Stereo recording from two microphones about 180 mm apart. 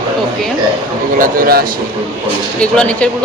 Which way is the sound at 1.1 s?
50° right (ahead or behind).